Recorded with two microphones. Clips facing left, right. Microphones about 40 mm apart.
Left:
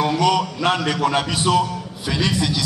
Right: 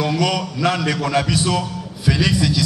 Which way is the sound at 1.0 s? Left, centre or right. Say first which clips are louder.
Left 1 dB; left.